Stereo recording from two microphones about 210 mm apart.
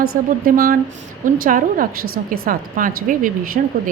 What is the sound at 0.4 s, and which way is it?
Speech, 45° right (ahead or behind).